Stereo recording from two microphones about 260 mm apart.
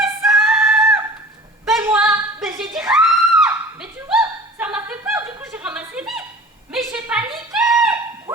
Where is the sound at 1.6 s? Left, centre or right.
Centre.